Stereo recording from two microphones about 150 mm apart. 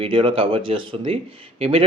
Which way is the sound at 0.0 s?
35° right (ahead or behind).